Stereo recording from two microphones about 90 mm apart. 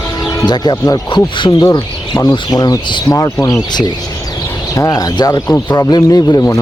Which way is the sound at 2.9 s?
60° left (ahead or behind).